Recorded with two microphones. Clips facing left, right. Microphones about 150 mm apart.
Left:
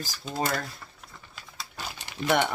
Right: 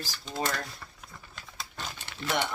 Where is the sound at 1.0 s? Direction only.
Centre (ahead or behind).